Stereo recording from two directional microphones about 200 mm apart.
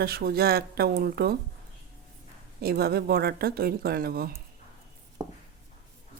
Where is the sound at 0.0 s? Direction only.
50° right (ahead or behind).